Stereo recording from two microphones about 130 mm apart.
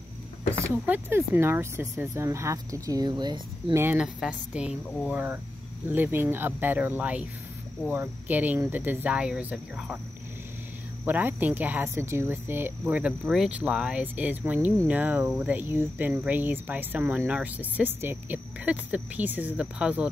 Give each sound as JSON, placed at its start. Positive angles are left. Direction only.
{"t": 0.8, "sound": "speech", "side_deg": -15}
{"t": 3.7, "sound": "speech", "side_deg": -15}
{"t": 11.1, "sound": "speech", "side_deg": -15}